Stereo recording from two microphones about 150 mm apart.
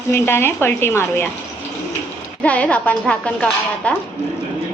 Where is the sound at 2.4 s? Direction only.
10° left (ahead or behind).